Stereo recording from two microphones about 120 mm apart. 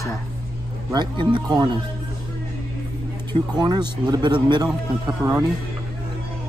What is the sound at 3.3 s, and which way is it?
Speech, 35° right (ahead or behind).